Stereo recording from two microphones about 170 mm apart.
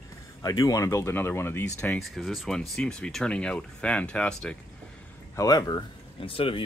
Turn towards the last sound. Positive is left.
turn(degrees=30)  # may be behind; listen again after turning